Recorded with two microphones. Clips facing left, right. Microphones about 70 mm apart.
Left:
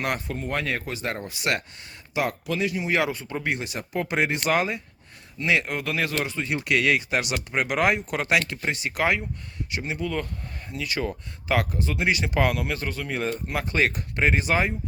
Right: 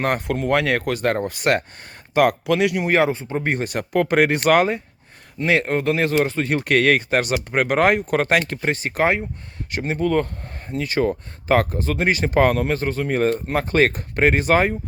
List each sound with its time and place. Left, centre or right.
0.3 s speech: right
2.5 s speech: right
2.9 s speech: right
3.5 s speech: right
5.4 s speech: right